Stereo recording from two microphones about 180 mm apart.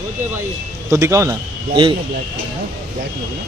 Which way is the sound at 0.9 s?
15° right (ahead or behind).